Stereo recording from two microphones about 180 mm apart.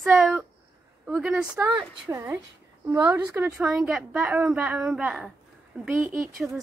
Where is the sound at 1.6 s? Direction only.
15° right (ahead or behind).